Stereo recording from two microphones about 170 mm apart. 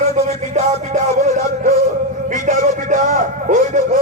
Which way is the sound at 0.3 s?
40° right (ahead or behind).